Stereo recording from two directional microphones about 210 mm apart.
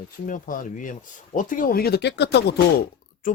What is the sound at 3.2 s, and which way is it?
Speech, 40° left (ahead or behind).